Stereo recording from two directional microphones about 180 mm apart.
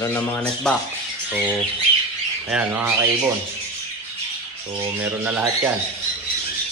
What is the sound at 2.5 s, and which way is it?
Speech, 10° right (ahead or behind).